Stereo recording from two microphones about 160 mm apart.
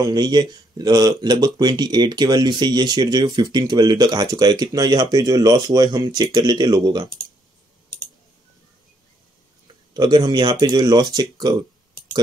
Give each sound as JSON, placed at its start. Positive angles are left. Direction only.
{"t": 0.0, "sound": "speech", "side_deg": -25}
{"t": 9.9, "sound": "speech", "side_deg": -25}